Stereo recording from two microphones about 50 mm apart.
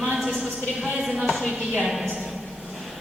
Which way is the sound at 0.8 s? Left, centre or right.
Centre.